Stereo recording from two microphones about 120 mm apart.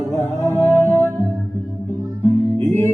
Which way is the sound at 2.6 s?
25° left (ahead or behind).